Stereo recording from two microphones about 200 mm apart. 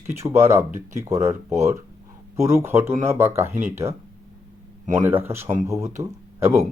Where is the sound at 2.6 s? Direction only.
15° right (ahead or behind).